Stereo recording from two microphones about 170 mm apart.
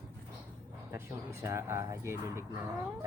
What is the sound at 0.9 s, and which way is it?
Speech, 15° right (ahead or behind).